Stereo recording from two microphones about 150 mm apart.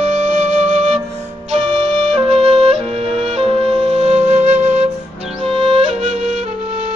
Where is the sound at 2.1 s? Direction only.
45° right (ahead or behind).